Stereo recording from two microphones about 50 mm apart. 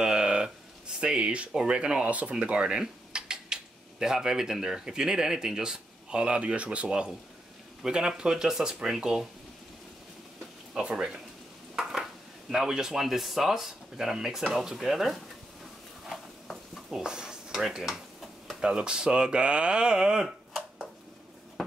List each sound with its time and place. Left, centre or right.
0.0 s a sound: centre
1.7 s speech: centre
2.0 s speech: right
7.8 s speech: centre
10.7 s speech: centre
11.7 s speech: centre
16.4 s a sound: centre
17.0 s stir: centre
18.6 s speech: centre